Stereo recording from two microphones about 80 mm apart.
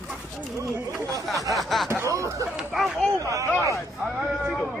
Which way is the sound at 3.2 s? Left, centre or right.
Right.